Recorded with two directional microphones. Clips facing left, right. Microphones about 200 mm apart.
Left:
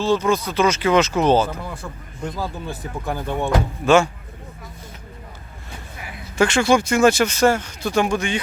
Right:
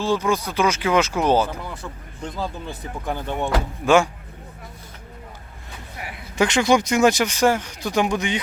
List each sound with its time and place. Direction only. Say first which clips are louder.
0.0 s speech: left 2 dB; 15° right (ahead or behind)
2.4 s speech: right 2 dB; 10° left (ahead or behind)
3.8 s speech: left 1 dB; 15° right (ahead or behind)
6.3 s speech: left 1 dB; 15° right (ahead or behind)